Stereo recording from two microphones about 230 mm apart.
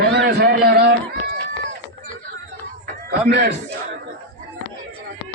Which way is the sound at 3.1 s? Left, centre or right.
Right.